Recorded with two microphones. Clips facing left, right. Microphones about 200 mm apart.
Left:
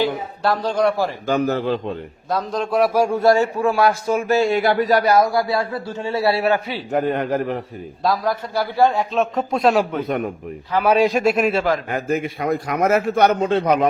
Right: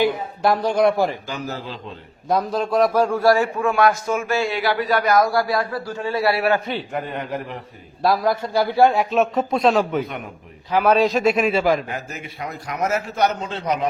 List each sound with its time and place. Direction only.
0.0 s speech: 15° right (ahead or behind)
1.3 s a man's voice: 60° left (ahead or behind)
2.3 s a man's voice: 5° right (ahead or behind)
3.2 s a man's voice: 25° left (ahead or behind)
6.5 s a man's voice: 5° left (ahead or behind)
6.9 s a man's voice: 45° left (ahead or behind)
8.0 s a man's voice: 10° right (ahead or behind)
10.8 s a man's voice: 10° left (ahead or behind)
11.9 s a man's voice: 55° left (ahead or behind)